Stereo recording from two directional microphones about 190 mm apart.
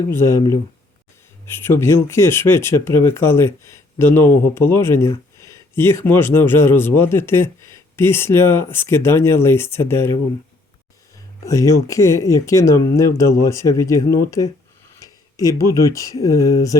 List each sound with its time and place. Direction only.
0.1 s speech: 15° left (ahead or behind)
11.4 s speech: 15° left (ahead or behind)
14.9 s a sound: 15° left (ahead or behind)
15.6 s speech: 15° left (ahead or behind)